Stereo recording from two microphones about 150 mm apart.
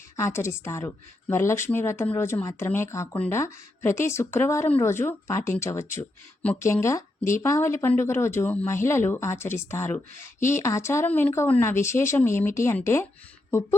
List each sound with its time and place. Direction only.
0.2 s a woman's voice: 20° left (ahead or behind)